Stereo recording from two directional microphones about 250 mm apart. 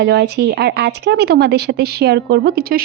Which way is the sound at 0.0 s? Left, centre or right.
Right.